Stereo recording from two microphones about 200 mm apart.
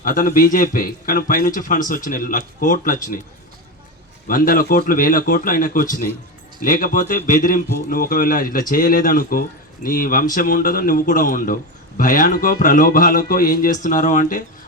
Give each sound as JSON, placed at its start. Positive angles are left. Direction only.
{"t": 0.0, "sound": "a man's voice", "side_deg": 45}
{"t": 4.3, "sound": "a man's voice", "side_deg": 45}